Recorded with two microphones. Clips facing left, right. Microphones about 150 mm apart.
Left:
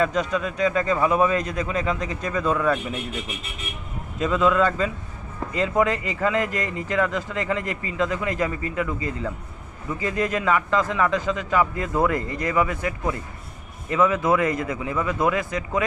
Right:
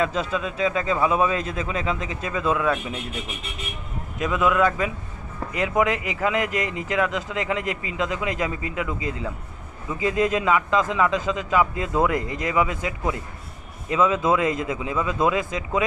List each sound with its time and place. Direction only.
0.2 s speech: 25° right (ahead or behind)
0.7 s speech: 5° right (ahead or behind)
1.0 s speech: 15° right (ahead or behind)
1.8 s speech: 5° right (ahead or behind)
4.2 s speech: 5° right (ahead or behind)
7.6 s a man's voice: 90° right
7.9 s speech: 15° right (ahead or behind)